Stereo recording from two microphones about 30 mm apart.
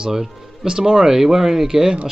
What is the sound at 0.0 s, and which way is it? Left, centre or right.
Speech, centre.